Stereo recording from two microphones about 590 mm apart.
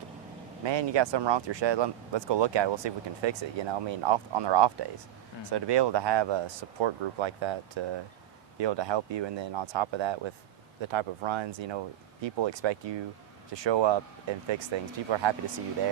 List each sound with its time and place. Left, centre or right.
0.6 s speech: right